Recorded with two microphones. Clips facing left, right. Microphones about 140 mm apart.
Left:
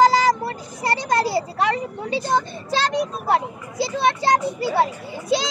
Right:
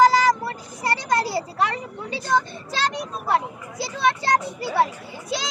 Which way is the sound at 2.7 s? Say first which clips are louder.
Left 5 dB; 25° left (ahead or behind).